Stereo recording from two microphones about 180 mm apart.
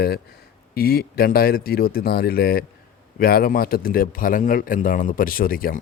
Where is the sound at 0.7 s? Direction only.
55° left (ahead or behind).